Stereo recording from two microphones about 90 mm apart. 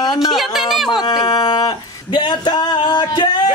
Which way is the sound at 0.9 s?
55° left (ahead or behind).